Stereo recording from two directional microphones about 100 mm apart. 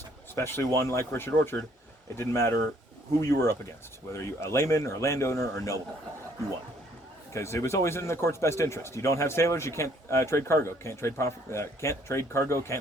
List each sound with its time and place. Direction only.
0.3 s speech: 25° left (ahead or behind)
7.3 s speech: 30° left (ahead or behind)